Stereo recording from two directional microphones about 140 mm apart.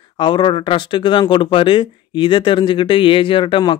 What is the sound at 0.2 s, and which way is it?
Speech, 35° left (ahead or behind).